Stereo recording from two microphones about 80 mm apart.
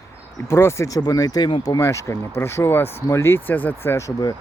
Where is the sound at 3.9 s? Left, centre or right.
Left.